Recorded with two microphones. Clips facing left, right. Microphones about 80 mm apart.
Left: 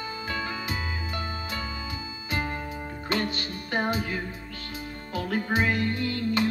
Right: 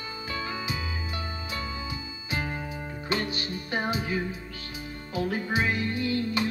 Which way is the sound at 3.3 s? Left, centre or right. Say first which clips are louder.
Left 1 dB; left.